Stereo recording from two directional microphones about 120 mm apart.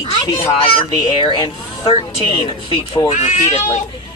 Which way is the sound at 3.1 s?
75° left (ahead or behind).